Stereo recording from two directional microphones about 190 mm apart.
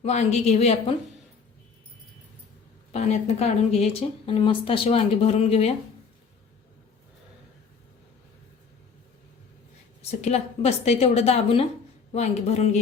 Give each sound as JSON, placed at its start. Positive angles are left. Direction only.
{"t": 0.0, "sound": "a woman's voice", "side_deg": 35}
{"t": 2.9, "sound": "a woman's voice", "side_deg": 35}
{"t": 10.0, "sound": "a woman's voice", "side_deg": 35}